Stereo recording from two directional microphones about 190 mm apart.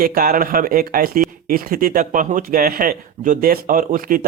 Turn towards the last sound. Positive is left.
turn(degrees=-45)  # may be behind; listen again after turning